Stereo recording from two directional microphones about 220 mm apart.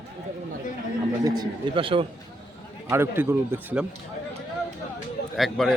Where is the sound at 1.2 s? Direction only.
20° right (ahead or behind).